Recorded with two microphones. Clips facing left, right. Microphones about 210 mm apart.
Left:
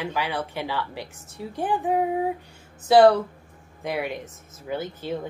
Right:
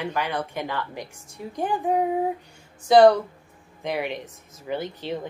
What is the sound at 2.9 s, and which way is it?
A woman's voice, 5° left (ahead or behind).